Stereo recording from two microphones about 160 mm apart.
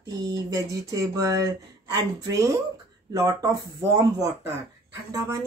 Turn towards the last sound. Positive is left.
turn(degrees=-20)  # may be behind; listen again after turning